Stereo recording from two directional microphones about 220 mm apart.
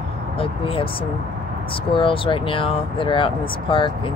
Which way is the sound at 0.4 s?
25° left (ahead or behind).